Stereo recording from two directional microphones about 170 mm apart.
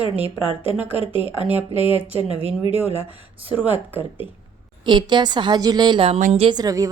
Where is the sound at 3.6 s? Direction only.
10° right (ahead or behind).